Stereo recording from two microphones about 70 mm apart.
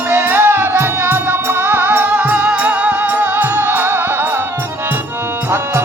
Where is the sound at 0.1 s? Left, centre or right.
Right.